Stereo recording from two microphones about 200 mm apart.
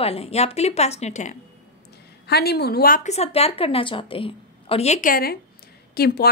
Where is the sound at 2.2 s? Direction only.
55° left (ahead or behind).